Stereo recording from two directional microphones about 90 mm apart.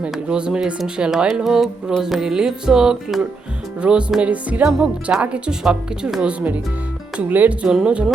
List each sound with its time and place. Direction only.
0.0 s speech: 10° right (ahead or behind)
2.0 s music: centre (ahead or behind)
3.8 s speech: 10° right (ahead or behind)
7.2 s speech: 20° right (ahead or behind)